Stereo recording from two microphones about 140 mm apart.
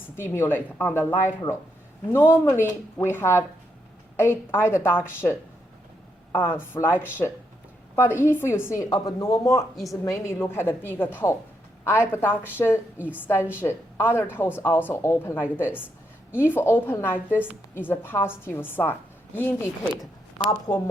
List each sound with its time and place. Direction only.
0.2 s a woman's voice: 15° left (ahead or behind)
2.1 s a woman's voice: 20° left (ahead or behind)
7.9 s a woman's voice: 15° left (ahead or behind)
9.7 s a woman's voice: centre (ahead or behind)
10.0 s a woman's voice: 20° left (ahead or behind)